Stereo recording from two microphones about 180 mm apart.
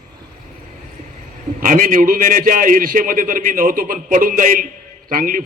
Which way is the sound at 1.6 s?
50° right (ahead or behind).